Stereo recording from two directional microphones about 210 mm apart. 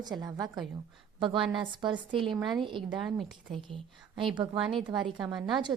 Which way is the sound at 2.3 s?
Centre (ahead or behind).